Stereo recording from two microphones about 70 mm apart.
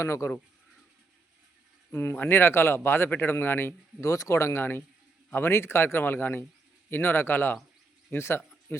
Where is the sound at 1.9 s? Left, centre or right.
Left.